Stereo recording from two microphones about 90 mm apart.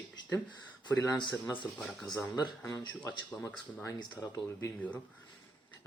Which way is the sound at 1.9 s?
5° left (ahead or behind).